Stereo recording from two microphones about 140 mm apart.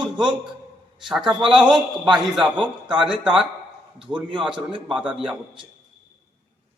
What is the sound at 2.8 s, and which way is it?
Speech, 35° right (ahead or behind).